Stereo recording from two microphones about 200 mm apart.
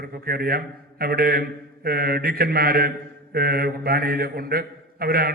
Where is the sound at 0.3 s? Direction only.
50° right (ahead or behind).